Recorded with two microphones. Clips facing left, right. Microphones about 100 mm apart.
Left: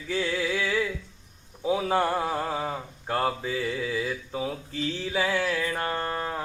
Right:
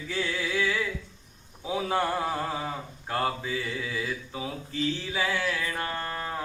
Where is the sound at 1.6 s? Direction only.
15° left (ahead or behind).